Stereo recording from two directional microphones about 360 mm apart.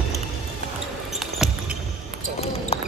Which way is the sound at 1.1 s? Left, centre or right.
Centre.